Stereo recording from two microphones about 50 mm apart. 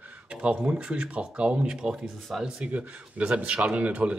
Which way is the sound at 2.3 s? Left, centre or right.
Centre.